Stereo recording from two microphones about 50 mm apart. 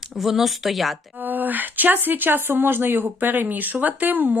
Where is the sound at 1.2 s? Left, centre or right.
Right.